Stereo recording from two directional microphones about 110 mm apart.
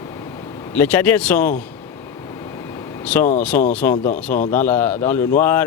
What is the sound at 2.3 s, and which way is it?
Vehicle, 35° left (ahead or behind).